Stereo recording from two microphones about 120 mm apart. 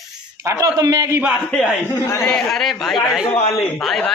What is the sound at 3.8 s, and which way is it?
Speech, 5° left (ahead or behind).